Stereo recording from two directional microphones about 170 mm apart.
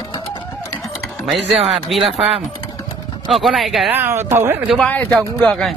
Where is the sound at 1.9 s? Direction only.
Centre (ahead or behind).